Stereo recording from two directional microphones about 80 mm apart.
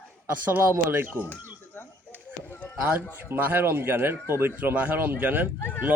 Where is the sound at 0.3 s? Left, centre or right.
Right.